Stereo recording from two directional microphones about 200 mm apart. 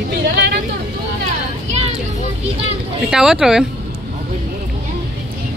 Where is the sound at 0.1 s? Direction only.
55° right (ahead or behind).